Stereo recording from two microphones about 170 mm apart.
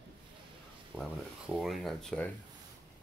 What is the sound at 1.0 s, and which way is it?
Speech, centre (ahead or behind).